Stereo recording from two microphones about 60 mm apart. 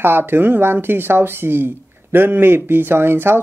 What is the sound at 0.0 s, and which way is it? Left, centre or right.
Speech, right.